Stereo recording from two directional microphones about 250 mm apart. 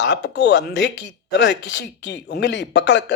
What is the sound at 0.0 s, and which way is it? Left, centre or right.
Speech, left.